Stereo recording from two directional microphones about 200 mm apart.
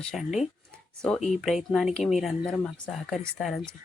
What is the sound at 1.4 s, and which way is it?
Speech, centre (ahead or behind).